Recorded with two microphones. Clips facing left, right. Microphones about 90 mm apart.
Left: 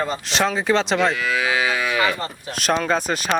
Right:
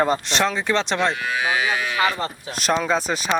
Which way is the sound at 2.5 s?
Centre (ahead or behind).